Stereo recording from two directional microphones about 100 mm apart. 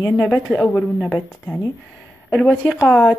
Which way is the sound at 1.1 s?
10° left (ahead or behind).